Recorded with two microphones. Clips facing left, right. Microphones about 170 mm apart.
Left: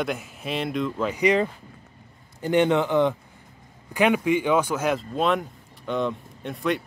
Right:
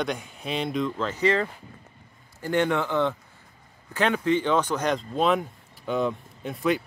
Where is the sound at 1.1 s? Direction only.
15° left (ahead or behind).